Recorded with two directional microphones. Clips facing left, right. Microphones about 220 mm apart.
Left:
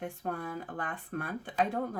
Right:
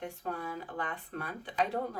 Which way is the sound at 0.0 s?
50° left (ahead or behind).